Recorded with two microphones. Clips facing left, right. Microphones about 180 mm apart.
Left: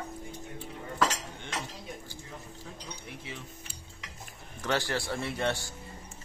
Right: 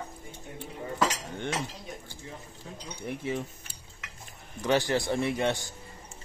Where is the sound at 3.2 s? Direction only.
50° right (ahead or behind).